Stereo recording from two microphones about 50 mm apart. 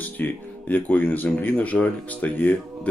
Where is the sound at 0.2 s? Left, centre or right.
Left.